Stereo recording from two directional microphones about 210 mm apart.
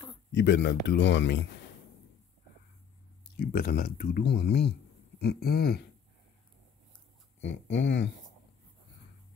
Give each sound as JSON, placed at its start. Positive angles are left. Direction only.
{"t": 0.3, "sound": "speech", "side_deg": 60}
{"t": 3.3, "sound": "speech", "side_deg": 45}
{"t": 7.3, "sound": "speech", "side_deg": 60}